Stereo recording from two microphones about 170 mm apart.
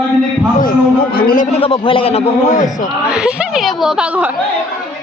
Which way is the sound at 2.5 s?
50° left (ahead or behind).